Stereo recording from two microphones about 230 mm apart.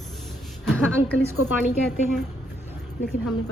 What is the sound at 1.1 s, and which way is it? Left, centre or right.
Speech, left.